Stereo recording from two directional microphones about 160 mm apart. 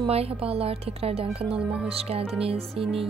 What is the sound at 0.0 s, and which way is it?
A woman's voice, 35° right (ahead or behind).